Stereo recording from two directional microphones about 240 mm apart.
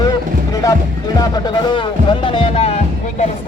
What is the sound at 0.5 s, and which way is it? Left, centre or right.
Speech, centre.